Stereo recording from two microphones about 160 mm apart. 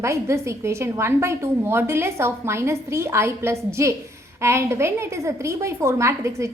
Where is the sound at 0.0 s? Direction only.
15° right (ahead or behind).